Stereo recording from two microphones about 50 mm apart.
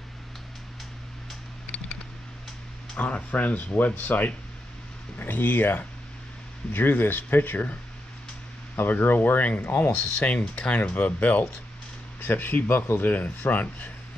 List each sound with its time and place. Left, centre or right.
3.0 s speech: left
8.7 s speech: left
10.1 s speech: left
12.2 s speech: left